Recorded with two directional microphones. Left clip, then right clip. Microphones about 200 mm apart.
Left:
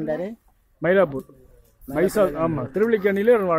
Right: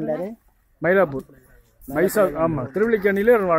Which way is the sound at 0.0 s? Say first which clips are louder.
Right 1 dB; centre (ahead or behind).